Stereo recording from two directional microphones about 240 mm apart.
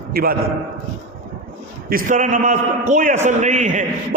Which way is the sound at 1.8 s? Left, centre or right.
Right.